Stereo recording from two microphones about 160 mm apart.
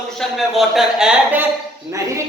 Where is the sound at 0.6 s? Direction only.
5° right (ahead or behind).